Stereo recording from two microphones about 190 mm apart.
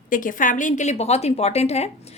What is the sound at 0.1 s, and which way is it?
A woman's voice, 45° left (ahead or behind).